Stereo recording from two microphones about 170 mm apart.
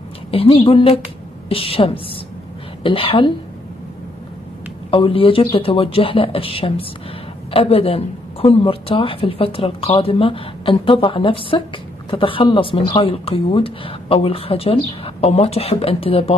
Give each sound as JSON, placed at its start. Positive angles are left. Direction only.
{"t": 0.3, "sound": "speech", "side_deg": 35}
{"t": 4.9, "sound": "speech", "side_deg": 30}